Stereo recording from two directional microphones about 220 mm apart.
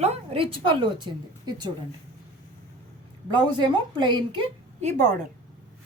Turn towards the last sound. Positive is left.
turn(degrees=-30)  # may be behind; listen again after turning